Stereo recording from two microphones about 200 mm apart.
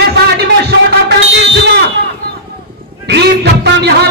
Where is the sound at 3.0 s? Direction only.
60° right (ahead or behind).